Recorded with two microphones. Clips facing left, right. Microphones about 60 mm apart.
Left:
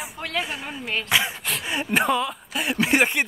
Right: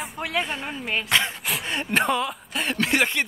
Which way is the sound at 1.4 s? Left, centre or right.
Centre.